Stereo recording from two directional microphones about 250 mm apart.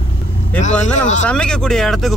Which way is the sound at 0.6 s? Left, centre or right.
Left.